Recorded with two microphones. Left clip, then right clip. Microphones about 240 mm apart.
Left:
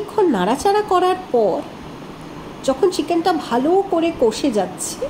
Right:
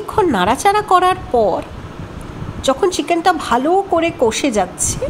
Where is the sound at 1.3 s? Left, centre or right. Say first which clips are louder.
Right 1 dB; right.